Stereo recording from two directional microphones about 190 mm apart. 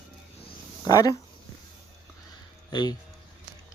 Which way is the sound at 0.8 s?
20° left (ahead or behind).